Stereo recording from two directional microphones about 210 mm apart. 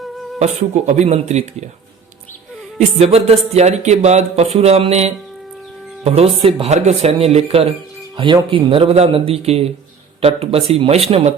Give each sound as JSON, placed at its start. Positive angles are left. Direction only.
{"t": 0.3, "sound": "speech", "side_deg": -30}
{"t": 2.7, "sound": "a man's voice", "side_deg": -30}